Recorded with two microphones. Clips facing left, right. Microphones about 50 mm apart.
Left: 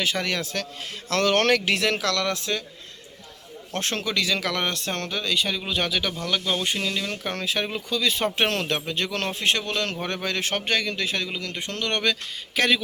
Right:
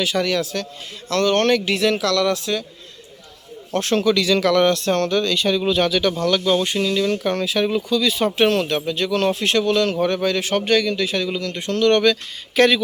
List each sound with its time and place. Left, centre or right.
0.0 s speech: left
1.2 s speech: left
3.8 s speech: left
4.0 s speech: centre
12.5 s speech: centre